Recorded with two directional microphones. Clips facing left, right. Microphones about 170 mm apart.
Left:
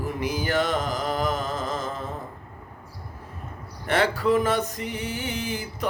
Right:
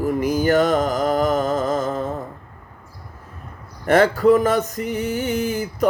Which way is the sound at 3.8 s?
45° right (ahead or behind).